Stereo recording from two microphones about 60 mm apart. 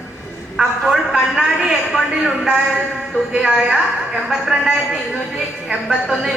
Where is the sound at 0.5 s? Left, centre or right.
Centre.